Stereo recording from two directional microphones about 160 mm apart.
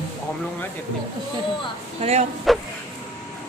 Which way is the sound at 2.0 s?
40° right (ahead or behind).